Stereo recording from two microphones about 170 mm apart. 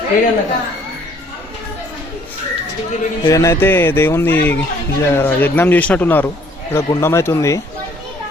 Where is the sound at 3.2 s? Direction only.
20° left (ahead or behind).